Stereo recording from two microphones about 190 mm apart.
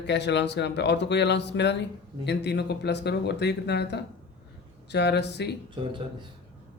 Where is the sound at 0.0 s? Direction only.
65° left (ahead or behind).